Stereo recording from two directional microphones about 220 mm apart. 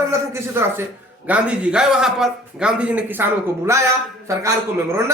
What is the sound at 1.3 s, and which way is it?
A man's voice, 5° right (ahead or behind).